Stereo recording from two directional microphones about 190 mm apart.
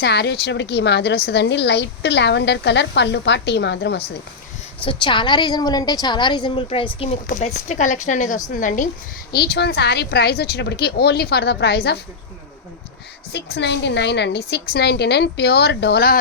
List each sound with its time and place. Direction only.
0.0 s a woman's voice: 60° left (ahead or behind)
4.8 s a woman's voice: 25° left (ahead or behind); by 8.9 s 45° left (ahead or behind)
9.3 s a woman's voice: 60° left (ahead or behind)
13.3 s a woman's voice: 60° left (ahead or behind)